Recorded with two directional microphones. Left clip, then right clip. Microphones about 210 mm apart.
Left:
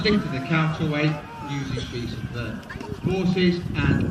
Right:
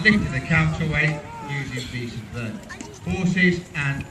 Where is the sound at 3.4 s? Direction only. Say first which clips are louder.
Right 3 dB; 50° left (ahead or behind).